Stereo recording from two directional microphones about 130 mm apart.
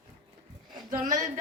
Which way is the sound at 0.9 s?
80° right.